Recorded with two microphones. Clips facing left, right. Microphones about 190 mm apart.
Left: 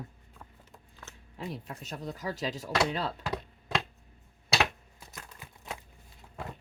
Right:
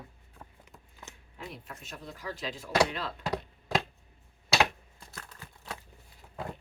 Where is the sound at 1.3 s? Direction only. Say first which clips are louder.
Left 5 dB; 35° left (ahead or behind).